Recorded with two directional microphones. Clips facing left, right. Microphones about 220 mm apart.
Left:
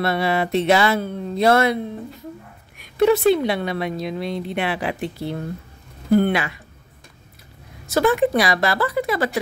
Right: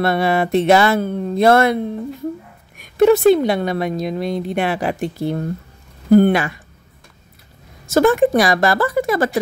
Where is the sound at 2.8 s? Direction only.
45° right (ahead or behind).